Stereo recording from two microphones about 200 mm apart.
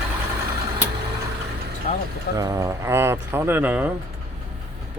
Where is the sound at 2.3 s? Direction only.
15° right (ahead or behind).